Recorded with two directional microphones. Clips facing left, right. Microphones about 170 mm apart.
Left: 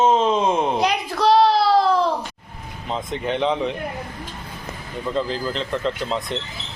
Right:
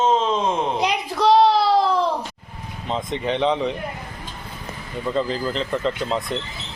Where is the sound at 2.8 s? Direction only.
Centre (ahead or behind).